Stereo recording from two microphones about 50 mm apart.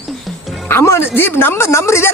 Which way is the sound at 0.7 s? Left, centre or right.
Left.